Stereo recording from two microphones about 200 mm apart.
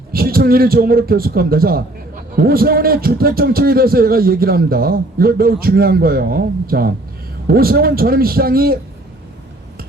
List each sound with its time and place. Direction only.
0.1 s a man's voice: 50° right (ahead or behind)